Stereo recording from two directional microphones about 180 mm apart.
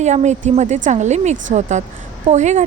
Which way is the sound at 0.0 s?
40° right (ahead or behind).